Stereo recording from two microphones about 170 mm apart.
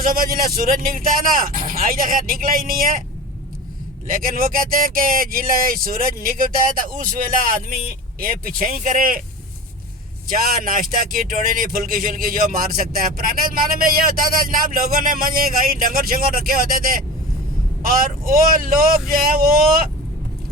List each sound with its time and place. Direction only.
0.0 s speech: 60° right (ahead or behind)
4.0 s speech: 55° right (ahead or behind)
10.4 s speech: 55° right (ahead or behind)